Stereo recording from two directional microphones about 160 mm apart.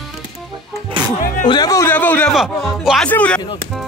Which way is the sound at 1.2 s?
60° left (ahead or behind).